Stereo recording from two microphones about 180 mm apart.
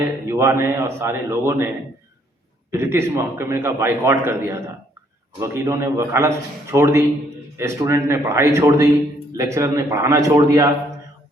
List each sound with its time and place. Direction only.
0.3 s a man's voice: 15° right (ahead or behind)
2.7 s a man's voice: 15° right (ahead or behind)